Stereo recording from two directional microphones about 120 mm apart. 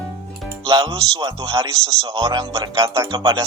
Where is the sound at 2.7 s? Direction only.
30° right (ahead or behind).